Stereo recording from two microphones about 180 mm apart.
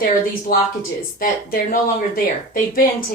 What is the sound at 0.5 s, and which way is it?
Speech, 55° left (ahead or behind).